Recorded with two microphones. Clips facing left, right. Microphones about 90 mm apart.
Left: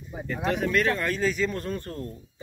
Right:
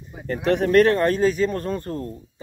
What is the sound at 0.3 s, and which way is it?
Speech, 50° right (ahead or behind).